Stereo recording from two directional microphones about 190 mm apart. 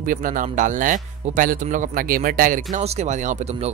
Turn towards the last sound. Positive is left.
turn(degrees=-35)  # may be behind; listen again after turning